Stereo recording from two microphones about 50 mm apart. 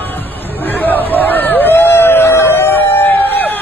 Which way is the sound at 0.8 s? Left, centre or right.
Left.